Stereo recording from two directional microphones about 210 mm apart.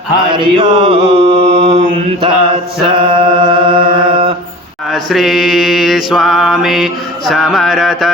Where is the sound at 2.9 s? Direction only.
25° right (ahead or behind).